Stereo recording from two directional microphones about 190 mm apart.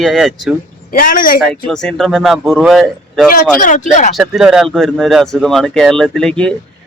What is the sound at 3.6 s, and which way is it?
Speech, 40° left (ahead or behind).